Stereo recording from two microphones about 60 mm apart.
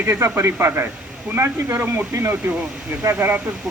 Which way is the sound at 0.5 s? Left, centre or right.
Right.